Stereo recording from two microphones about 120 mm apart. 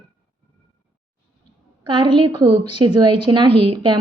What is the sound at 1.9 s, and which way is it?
A woman's voice, 40° right (ahead or behind).